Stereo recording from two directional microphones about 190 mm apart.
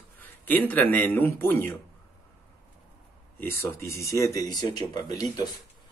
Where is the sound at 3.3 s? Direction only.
15° left (ahead or behind).